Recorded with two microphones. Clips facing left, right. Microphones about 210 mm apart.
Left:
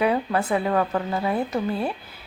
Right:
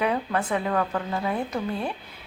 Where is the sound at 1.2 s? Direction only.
5° left (ahead or behind).